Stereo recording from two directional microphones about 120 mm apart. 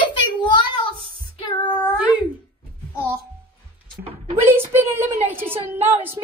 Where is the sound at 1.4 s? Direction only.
40° left (ahead or behind).